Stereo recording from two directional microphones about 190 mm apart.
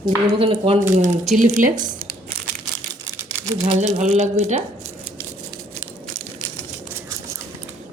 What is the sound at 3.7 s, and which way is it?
Speech, 35° right (ahead or behind).